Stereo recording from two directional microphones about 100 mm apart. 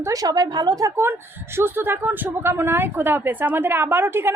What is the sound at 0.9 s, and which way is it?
Speech, 25° right (ahead or behind).